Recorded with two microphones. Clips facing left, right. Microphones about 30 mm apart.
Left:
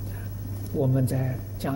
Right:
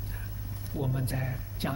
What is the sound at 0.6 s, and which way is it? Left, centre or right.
Speech, right.